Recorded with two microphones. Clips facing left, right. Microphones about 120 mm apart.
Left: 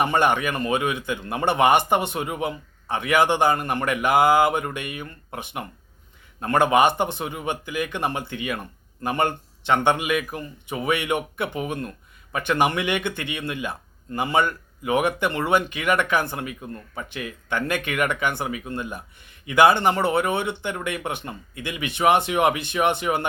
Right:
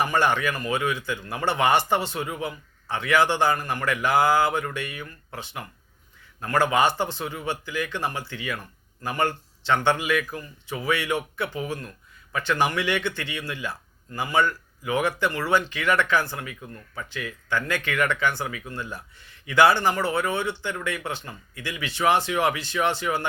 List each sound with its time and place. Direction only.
0.0 s a man's voice: 20° left (ahead or behind)